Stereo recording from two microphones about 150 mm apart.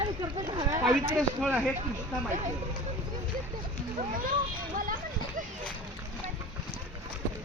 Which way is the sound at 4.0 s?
70° right (ahead or behind).